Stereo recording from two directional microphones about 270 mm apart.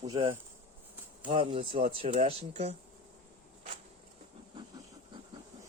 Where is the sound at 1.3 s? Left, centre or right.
Right.